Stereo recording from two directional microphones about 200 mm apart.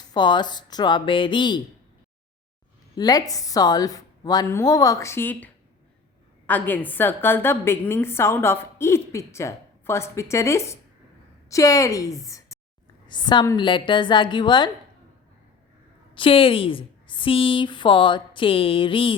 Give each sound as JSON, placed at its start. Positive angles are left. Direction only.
{"t": 0.1, "sound": "a woman's voice", "side_deg": 20}
{"t": 2.9, "sound": "a woman's voice", "side_deg": 20}
{"t": 6.5, "sound": "a woman's voice", "side_deg": 10}
{"t": 16.1, "sound": "a woman's voice", "side_deg": 25}